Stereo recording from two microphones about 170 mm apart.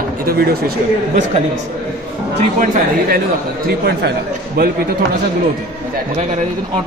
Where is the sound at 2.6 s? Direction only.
50° right (ahead or behind).